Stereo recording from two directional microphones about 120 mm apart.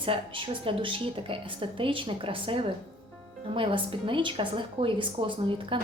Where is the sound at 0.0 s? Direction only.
45° right (ahead or behind).